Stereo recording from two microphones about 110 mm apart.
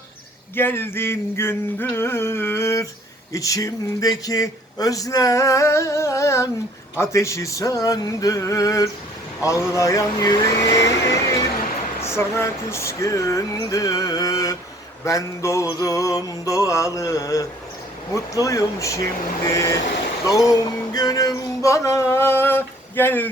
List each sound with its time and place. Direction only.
0.5 s speech: 20° left (ahead or behind)
13.7 s music: 35° left (ahead or behind)
15.0 s speech: 30° left (ahead or behind)
20.5 s music: 35° left (ahead or behind); by 23.3 s 20° left (ahead or behind)